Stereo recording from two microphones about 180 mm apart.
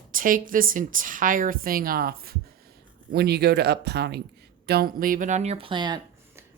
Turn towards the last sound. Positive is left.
turn(degrees=-25)  # may be behind; listen again after turning